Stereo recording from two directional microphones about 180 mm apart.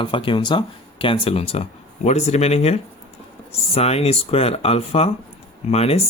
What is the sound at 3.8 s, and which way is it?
Speech, 35° left (ahead or behind).